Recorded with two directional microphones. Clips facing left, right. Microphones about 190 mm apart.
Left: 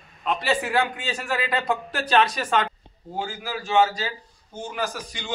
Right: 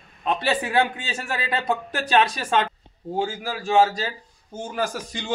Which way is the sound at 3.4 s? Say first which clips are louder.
Right 1 dB; 40° right (ahead or behind).